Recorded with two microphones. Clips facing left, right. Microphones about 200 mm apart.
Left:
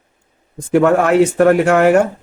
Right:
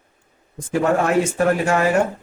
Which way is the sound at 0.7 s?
70° left (ahead or behind).